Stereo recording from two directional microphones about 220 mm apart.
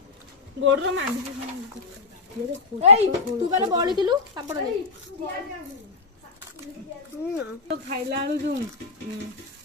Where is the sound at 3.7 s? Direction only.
20° right (ahead or behind).